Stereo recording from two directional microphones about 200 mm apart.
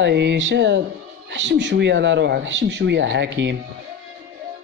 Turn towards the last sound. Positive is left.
turn(degrees=-60)  # may be behind; listen again after turning